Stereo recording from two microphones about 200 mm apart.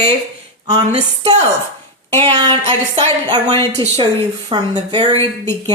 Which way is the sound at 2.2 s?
20° right (ahead or behind).